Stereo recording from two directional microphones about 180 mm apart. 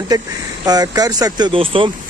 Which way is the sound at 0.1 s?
20° right (ahead or behind).